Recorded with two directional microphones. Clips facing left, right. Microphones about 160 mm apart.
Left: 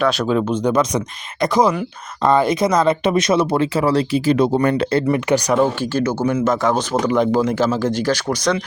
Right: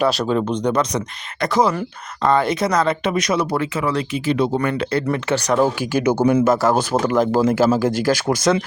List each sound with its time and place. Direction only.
0.0 s speech: centre (ahead or behind); by 5.0 s 30° left (ahead or behind)
5.1 s speech: 15° left (ahead or behind)
5.5 s speech: 10° right (ahead or behind)